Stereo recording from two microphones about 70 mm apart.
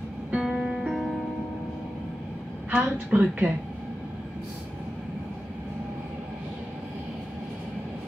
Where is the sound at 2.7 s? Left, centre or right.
Centre.